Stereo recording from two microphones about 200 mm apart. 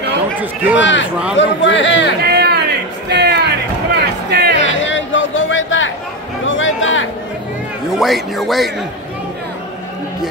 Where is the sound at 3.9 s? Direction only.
55° right (ahead or behind).